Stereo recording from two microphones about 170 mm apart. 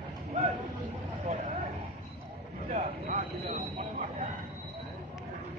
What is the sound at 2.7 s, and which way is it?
Train, 45° right (ahead or behind).